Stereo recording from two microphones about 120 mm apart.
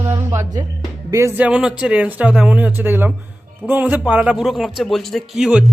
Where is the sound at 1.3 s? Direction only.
10° right (ahead or behind).